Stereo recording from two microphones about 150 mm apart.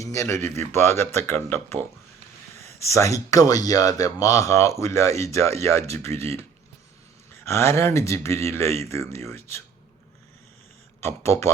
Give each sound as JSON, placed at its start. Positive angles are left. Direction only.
{"t": 0.0, "sound": "a sound", "side_deg": 20}
{"t": 0.7, "sound": "speech", "side_deg": 15}
{"t": 2.6, "sound": "a sound", "side_deg": -45}
{"t": 2.9, "sound": "speech", "side_deg": 20}
{"t": 6.1, "sound": "speech", "side_deg": -45}
{"t": 7.4, "sound": "speech", "side_deg": 15}
{"t": 11.0, "sound": "speech", "side_deg": 20}